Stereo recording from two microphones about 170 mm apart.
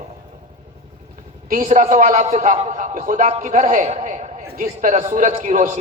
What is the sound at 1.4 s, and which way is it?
A man's voice, 50° right (ahead or behind).